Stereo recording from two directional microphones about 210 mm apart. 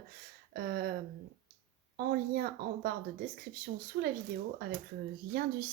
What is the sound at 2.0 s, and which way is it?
A woman's voice, 45° right (ahead or behind).